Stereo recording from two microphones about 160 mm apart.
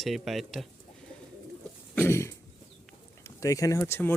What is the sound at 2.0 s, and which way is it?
Throat clearing, 15° left (ahead or behind).